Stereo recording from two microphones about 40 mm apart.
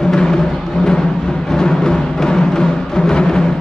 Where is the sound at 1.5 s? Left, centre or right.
Centre.